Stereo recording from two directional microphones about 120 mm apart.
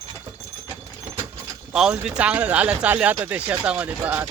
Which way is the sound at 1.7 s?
5° right (ahead or behind).